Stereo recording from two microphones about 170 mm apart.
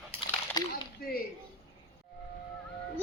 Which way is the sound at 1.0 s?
60° left (ahead or behind).